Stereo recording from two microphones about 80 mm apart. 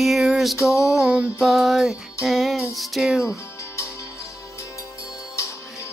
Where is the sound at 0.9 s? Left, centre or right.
Centre.